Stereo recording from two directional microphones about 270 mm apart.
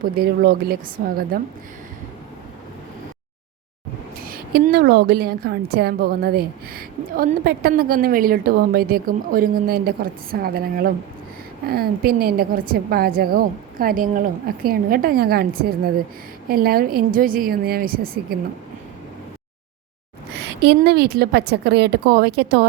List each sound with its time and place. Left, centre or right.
0.0 s a woman's voice: right
4.2 s a woman's voice: right
20.3 s a woman's voice: right